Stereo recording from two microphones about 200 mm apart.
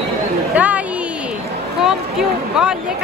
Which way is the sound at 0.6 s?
5° right (ahead or behind).